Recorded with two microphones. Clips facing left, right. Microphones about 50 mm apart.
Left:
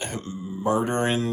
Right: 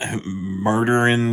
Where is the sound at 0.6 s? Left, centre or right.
Right.